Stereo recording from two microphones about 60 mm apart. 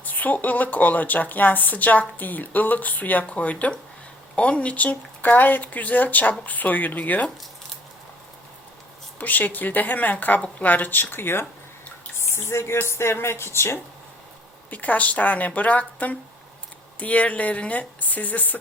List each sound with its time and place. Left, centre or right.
0.0 s a woman's voice: left
9.1 s a woman's voice: left
14.7 s a woman's voice: left